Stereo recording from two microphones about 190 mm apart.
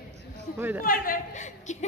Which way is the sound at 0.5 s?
10° right (ahead or behind).